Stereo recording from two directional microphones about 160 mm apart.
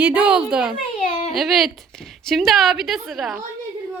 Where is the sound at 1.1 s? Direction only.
45° left (ahead or behind).